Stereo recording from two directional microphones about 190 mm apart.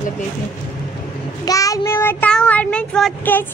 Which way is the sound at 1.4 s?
15° left (ahead or behind).